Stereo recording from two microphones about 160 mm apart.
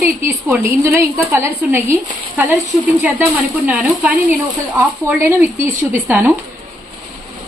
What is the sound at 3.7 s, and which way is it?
A woman's voice, 10° right (ahead or behind).